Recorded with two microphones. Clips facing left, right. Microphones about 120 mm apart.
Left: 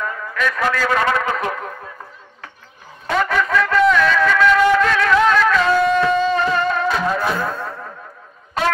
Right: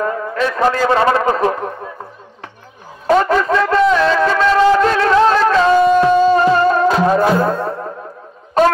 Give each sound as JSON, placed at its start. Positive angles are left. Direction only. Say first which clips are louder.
{"t": 0.0, "sound": "a man's voice", "louder": "right 5 dB", "side_deg": -30}
{"t": 3.1, "sound": "music", "louder": "right 6 dB", "side_deg": -35}